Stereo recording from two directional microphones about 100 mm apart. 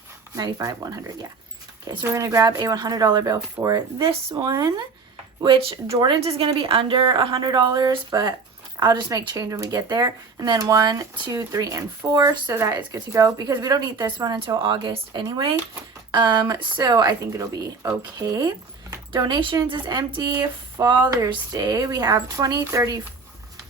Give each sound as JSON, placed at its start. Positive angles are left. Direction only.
{"t": 0.3, "sound": "speech", "side_deg": -35}
{"t": 4.0, "sound": "speech", "side_deg": -55}
{"t": 5.5, "sound": "a woman's voice", "side_deg": -70}
{"t": 6.6, "sound": "speech", "side_deg": -65}
{"t": 14.3, "sound": "speech", "side_deg": -60}